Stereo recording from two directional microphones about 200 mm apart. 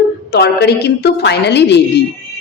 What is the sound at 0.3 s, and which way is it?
A woman's voice, 55° left (ahead or behind).